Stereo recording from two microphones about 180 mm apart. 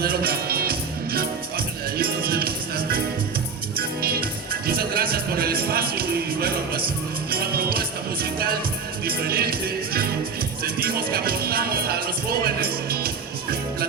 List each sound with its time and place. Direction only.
0.0 s music: 55° right (ahead or behind)